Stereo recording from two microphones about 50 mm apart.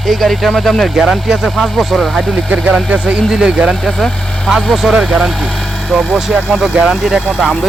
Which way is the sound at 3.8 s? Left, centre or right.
Centre.